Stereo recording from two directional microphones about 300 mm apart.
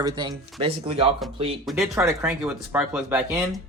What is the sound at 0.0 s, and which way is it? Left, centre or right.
Speech, centre.